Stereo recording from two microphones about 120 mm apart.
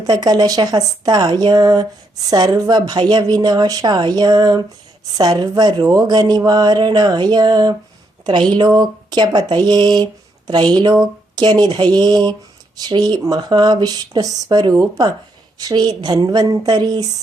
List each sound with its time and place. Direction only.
0.0 s speech: 30° right (ahead or behind)